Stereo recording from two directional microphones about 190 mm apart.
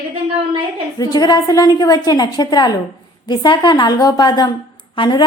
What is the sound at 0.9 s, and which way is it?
A woman's voice, 20° left (ahead or behind).